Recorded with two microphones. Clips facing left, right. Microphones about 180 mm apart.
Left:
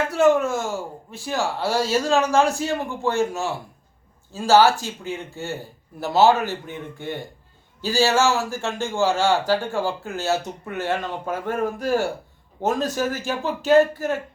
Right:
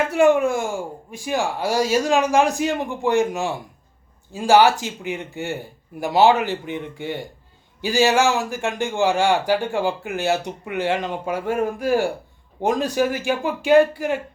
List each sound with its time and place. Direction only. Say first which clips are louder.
0.1 s a man's voice: right 1 dB; 15° right (ahead or behind)